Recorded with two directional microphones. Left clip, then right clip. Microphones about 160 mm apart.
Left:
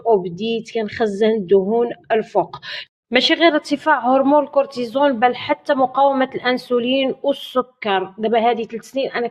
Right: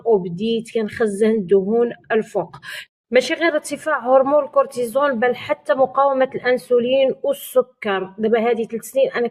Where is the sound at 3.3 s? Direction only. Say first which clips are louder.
Left 4 dB; 35° left (ahead or behind).